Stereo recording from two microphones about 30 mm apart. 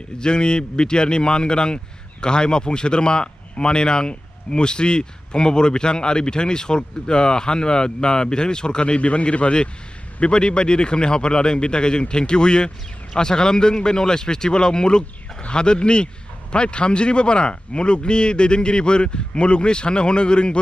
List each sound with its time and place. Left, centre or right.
0.2 s speech: left